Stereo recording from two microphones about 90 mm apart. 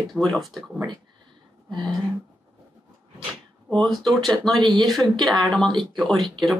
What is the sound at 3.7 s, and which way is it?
Speech, 5° left (ahead or behind).